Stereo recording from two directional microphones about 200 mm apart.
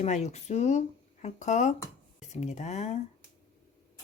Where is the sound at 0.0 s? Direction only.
35° left (ahead or behind).